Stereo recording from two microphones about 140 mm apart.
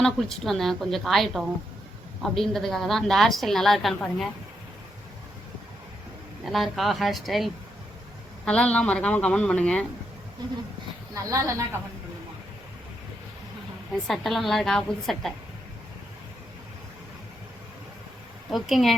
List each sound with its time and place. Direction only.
0.0 s a woman's voice: centre (ahead or behind)
6.4 s a woman's voice: centre (ahead or behind)
11.1 s speech: 20° right (ahead or behind)
14.1 s a woman's voice: centre (ahead or behind)
18.5 s a woman's voice: centre (ahead or behind)